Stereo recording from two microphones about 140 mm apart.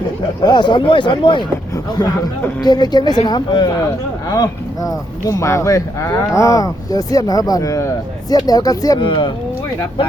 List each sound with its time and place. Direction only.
0.4 s speech: 30° left (ahead or behind)
2.6 s speech: 30° left (ahead or behind)
9.0 s speech: 35° left (ahead or behind)